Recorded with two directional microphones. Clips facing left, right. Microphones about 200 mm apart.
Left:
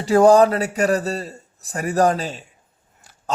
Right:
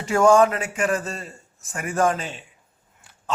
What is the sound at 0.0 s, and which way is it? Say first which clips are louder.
A man's voice: left 4 dB; 35° left (ahead or behind).